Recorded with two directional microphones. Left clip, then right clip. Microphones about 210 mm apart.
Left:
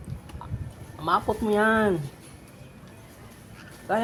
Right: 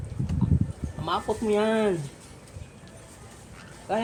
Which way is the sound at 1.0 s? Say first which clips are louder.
Left 3 dB; 30° left (ahead or behind).